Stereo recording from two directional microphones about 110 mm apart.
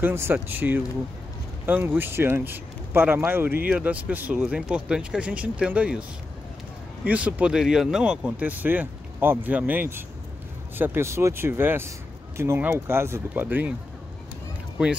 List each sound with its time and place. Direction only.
0.0 s speech: 20° right (ahead or behind)
7.1 s speech: 15° right (ahead or behind)